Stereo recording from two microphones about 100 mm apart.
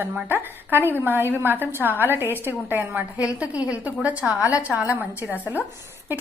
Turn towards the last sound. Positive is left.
turn(degrees=-15)  # may be behind; listen again after turning